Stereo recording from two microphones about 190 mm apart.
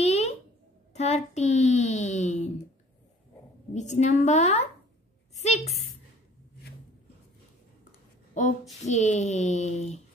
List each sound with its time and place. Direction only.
0.0 s a sound: 35° left (ahead or behind)
3.7 s a child's voice: 40° left (ahead or behind)
8.8 s a child's voice: 40° left (ahead or behind)